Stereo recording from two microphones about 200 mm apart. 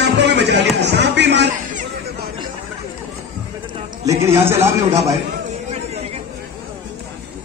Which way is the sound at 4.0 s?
15° right (ahead or behind).